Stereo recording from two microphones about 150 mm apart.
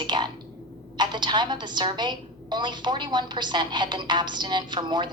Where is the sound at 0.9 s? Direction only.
30° right (ahead or behind).